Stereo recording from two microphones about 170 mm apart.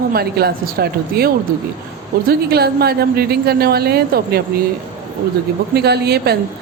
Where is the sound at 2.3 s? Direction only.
65° right (ahead or behind).